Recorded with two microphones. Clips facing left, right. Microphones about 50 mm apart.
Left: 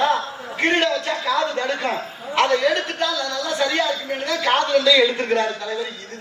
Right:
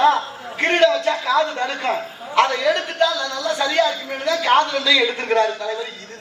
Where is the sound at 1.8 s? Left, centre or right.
Right.